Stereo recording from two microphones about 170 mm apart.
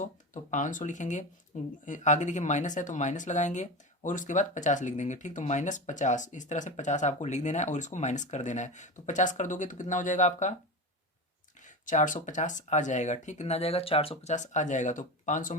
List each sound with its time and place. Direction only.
0.5 s speech: 50° left (ahead or behind)
11.6 s speech: 50° left (ahead or behind)